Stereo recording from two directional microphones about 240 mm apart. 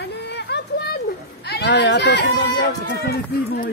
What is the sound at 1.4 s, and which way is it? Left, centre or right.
Speech, left.